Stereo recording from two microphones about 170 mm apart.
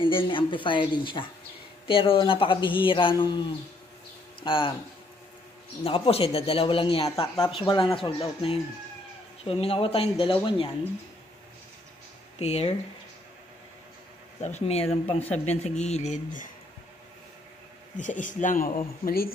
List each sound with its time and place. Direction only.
0.0 s speech: 30° left (ahead or behind)
5.9 s speech: 35° left (ahead or behind)
12.4 s speech: 40° left (ahead or behind)
14.4 s speech: 40° left (ahead or behind)
17.9 s a man's voice: 50° left (ahead or behind)